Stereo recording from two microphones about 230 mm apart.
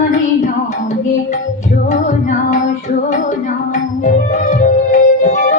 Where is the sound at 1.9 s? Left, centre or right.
Left.